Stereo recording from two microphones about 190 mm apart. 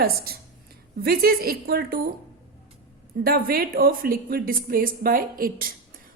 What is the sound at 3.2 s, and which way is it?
A woman's voice, 50° right (ahead or behind).